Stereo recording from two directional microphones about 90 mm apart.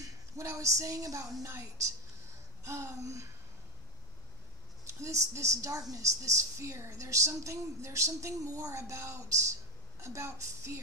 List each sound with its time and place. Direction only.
0.4 s a woman's voice: 35° right (ahead or behind)
4.8 s a woman's voice: 35° right (ahead or behind)